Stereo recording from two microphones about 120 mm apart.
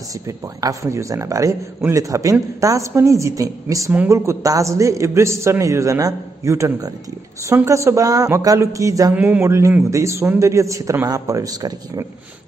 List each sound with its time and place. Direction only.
0.6 s a man's voice: 25° right (ahead or behind)
9.1 s a man's voice: 10° right (ahead or behind)
9.5 s a man's voice: 25° right (ahead or behind)